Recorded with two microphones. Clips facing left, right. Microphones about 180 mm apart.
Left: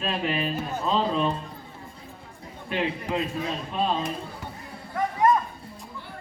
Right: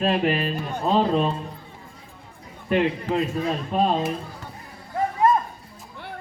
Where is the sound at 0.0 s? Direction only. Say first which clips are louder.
Right 5 dB; 60° right (ahead or behind).